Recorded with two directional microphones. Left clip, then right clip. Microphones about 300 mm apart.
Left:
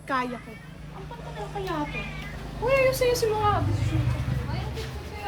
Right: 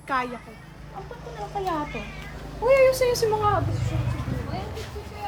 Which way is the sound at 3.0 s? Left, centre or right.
Right.